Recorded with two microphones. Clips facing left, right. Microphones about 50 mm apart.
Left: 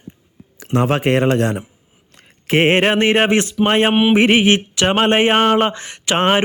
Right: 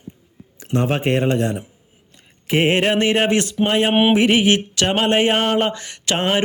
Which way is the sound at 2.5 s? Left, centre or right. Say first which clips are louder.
Left 3 dB; left.